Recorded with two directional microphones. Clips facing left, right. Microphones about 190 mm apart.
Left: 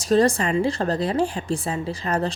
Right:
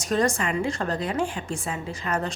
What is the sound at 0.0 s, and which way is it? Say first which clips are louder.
A woman's voice: left 5 dB; 35° left (ahead or behind).